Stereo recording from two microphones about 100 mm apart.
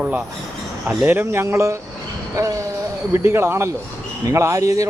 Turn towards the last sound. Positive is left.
turn(degrees=-35)  # may be behind; listen again after turning